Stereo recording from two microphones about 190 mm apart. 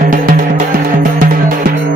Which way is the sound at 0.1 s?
50° right (ahead or behind).